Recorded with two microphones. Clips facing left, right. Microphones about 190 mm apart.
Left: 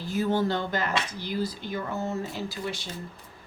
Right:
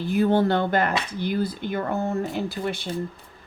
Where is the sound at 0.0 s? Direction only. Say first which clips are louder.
Right 6 dB; 60° right (ahead or behind).